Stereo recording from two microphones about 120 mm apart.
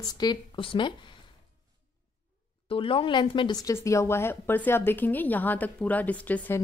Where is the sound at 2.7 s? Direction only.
45° left (ahead or behind); by 6.6 s 15° left (ahead or behind).